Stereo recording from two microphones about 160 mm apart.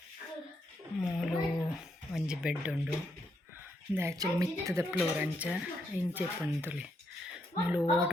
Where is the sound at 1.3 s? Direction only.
5° right (ahead or behind).